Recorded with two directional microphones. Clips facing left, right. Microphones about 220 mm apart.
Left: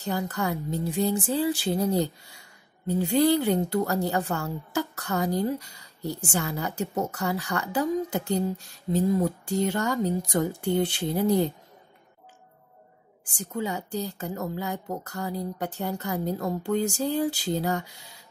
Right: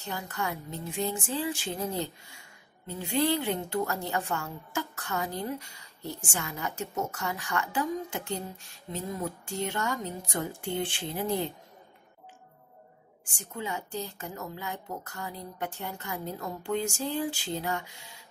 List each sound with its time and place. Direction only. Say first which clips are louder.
0.0 s a woman's voice: left 6 dB; 35° left (ahead or behind)
13.2 s a woman's voice: left 7 dB; 40° left (ahead or behind)